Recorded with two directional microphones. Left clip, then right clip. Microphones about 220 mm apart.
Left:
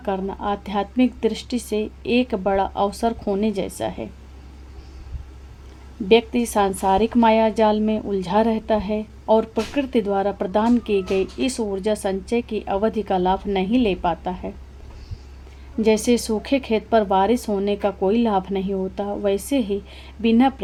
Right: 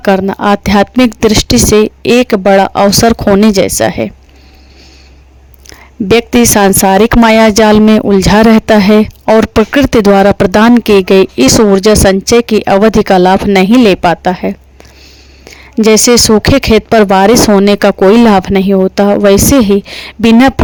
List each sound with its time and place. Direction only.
0.0 s speech: 50° right (ahead or behind)
6.1 s speech: 50° right (ahead or behind)
15.8 s speech: 45° right (ahead or behind)